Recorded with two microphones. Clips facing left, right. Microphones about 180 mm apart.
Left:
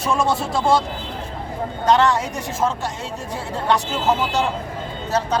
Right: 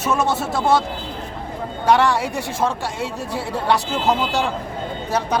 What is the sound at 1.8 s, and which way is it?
Speech, 10° right (ahead or behind).